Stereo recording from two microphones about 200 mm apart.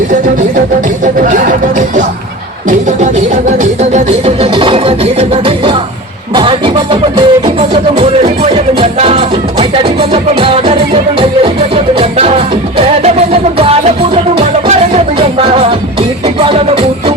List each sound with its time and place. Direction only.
3.5 s music: 35° right (ahead or behind)
7.7 s music: 35° right (ahead or behind)